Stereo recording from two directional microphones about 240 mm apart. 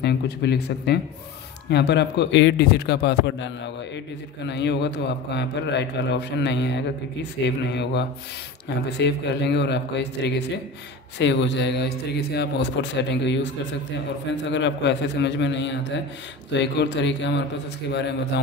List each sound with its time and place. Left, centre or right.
0.0 s a man's voice: left
4.5 s a man's voice: left